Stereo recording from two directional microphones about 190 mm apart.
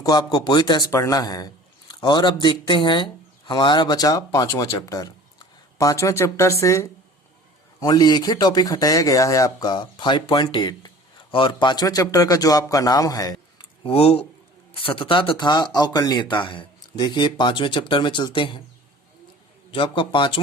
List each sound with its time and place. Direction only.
0.0 s speech: 20° left (ahead or behind)
19.7 s speech: 25° left (ahead or behind)